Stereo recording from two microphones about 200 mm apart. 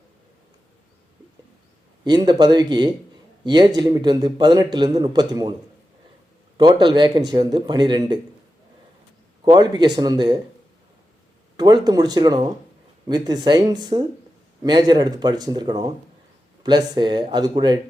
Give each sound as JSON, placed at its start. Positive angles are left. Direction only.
{"t": 2.0, "sound": "a man's voice", "side_deg": -20}
{"t": 6.6, "sound": "a man's voice", "side_deg": -20}
{"t": 9.4, "sound": "a man's voice", "side_deg": -20}
{"t": 11.5, "sound": "a man's voice", "side_deg": -20}